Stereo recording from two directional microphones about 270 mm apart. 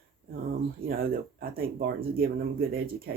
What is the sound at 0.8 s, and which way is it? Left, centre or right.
Speech, right.